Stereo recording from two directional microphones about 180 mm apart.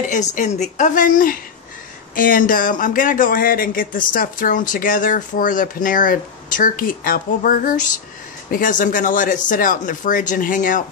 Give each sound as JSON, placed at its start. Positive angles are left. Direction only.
{"t": 0.1, "sound": "speech", "side_deg": 40}